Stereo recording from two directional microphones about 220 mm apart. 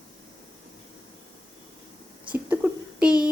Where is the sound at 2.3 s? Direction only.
5° right (ahead or behind).